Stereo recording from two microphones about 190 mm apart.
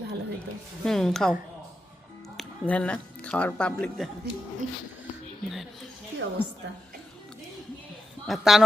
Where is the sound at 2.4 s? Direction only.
5° left (ahead or behind).